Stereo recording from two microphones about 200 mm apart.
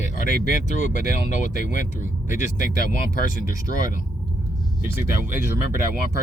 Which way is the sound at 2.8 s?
45° left (ahead or behind).